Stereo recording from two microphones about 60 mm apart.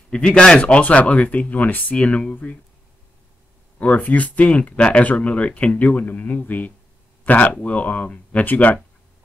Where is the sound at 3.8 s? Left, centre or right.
Left.